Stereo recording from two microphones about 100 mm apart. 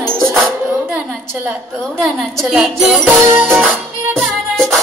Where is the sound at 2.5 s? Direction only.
5° right (ahead or behind).